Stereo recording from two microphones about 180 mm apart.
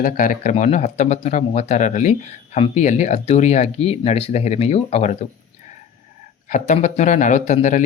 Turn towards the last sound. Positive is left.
turn(degrees=40)  # may be behind; listen again after turning